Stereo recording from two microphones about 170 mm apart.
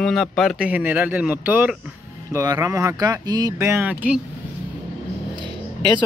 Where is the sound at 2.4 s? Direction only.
20° right (ahead or behind).